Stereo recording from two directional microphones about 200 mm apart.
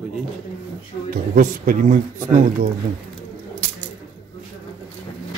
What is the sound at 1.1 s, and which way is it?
Speech, 40° right (ahead or behind).